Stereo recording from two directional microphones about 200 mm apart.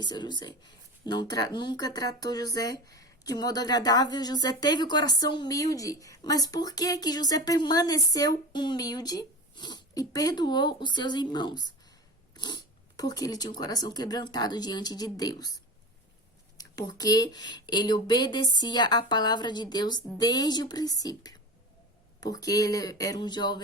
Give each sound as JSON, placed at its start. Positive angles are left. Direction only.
{"t": 0.0, "sound": "speech", "side_deg": 20}
{"t": 12.3, "sound": "a sound", "side_deg": 20}
{"t": 13.0, "sound": "speech", "side_deg": 20}
{"t": 16.6, "sound": "speech", "side_deg": 20}